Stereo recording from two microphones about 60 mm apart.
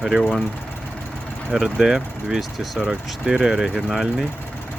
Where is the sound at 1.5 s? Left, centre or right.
Centre.